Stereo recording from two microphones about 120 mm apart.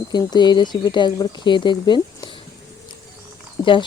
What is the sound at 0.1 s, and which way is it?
Speech, 35° left (ahead or behind).